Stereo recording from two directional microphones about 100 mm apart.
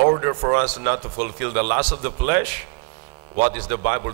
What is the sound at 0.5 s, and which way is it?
Speech, 25° right (ahead or behind).